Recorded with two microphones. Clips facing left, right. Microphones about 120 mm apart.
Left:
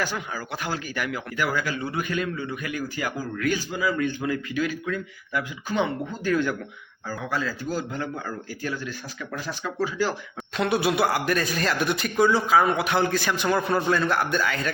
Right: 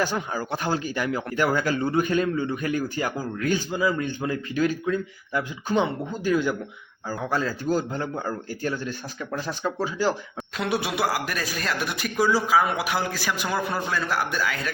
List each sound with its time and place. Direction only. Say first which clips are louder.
0.2 s speech: right 4 dB; 30° right (ahead or behind); by 6.5 s 15° right (ahead or behind)
7.3 s speech: right 4 dB; 30° right (ahead or behind)
10.6 s a man's voice: left 3 dB; centre (ahead or behind)